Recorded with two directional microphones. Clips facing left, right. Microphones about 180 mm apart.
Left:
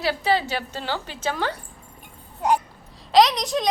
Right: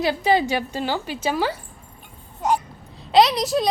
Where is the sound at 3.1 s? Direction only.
5° right (ahead or behind).